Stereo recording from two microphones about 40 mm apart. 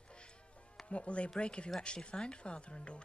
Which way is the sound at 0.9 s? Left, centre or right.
Left.